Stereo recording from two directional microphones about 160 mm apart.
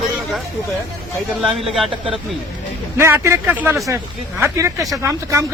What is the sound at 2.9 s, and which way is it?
A man's voice, 15° right (ahead or behind).